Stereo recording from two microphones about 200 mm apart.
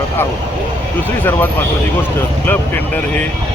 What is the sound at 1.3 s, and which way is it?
Speech, 10° left (ahead or behind).